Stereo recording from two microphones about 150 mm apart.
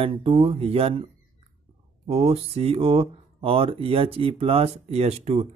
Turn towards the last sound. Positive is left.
turn(degrees=-45)  # may be behind; listen again after turning